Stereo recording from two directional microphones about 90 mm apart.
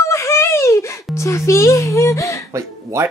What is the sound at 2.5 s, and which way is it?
Speech, 35° right (ahead or behind).